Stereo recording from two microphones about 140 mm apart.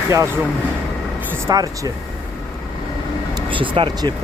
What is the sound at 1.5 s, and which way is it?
Speech, 25° right (ahead or behind).